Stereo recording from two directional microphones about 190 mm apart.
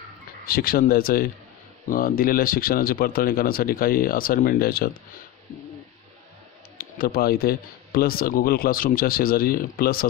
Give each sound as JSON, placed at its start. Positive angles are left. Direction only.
{"t": 0.5, "sound": "speech", "side_deg": 50}
{"t": 6.8, "sound": "speech", "side_deg": 50}